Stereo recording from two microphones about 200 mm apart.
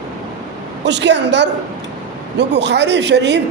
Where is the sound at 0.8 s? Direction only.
60° right (ahead or behind).